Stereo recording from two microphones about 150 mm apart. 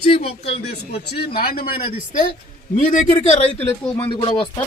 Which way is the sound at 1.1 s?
90° left.